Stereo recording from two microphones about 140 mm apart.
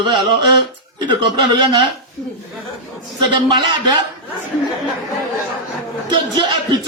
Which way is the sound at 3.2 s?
35° right (ahead or behind).